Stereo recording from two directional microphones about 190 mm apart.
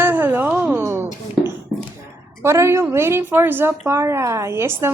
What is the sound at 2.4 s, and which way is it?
A woman's voice, 15° right (ahead or behind).